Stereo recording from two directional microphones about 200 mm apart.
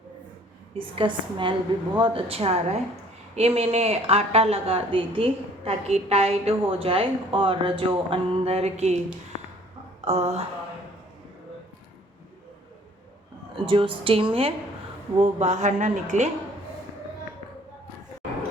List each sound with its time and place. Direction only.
0.8 s a woman's voice: 25° right (ahead or behind)
10.0 s speech: 35° right (ahead or behind)
13.7 s a woman's voice: 25° right (ahead or behind)